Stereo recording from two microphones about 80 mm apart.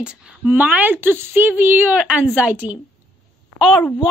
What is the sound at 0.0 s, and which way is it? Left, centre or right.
Speech, centre.